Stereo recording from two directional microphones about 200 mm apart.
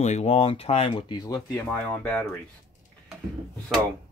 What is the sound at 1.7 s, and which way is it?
Speech, 10° left (ahead or behind).